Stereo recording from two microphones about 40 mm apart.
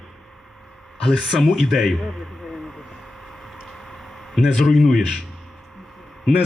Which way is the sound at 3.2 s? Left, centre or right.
Centre.